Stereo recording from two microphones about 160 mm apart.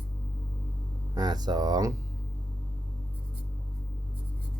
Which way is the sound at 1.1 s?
25° right (ahead or behind).